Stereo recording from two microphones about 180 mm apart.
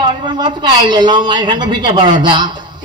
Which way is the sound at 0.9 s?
25° right (ahead or behind).